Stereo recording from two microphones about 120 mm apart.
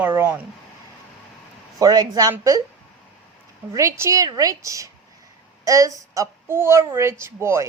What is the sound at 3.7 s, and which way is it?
A woman's voice, 25° right (ahead or behind).